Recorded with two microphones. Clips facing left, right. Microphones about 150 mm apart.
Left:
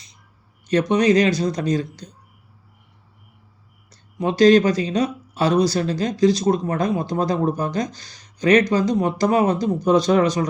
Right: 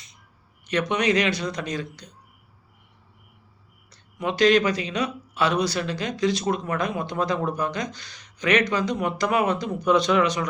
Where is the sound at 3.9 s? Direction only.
35° left (ahead or behind).